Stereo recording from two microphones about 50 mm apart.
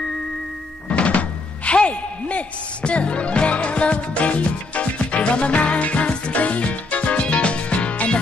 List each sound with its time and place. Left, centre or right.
0.9 s music: left